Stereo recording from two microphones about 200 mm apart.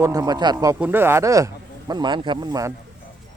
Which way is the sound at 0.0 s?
15° right (ahead or behind).